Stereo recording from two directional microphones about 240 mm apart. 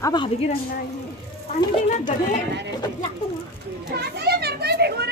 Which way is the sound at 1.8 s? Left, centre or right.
Left.